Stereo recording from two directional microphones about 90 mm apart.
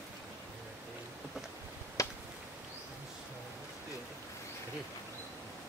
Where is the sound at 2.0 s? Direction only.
40° left (ahead or behind).